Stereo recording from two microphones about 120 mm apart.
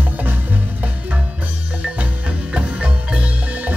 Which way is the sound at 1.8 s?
10° right (ahead or behind).